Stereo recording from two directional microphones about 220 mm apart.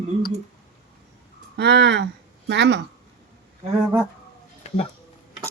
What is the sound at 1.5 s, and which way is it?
Speech, 50° right (ahead or behind).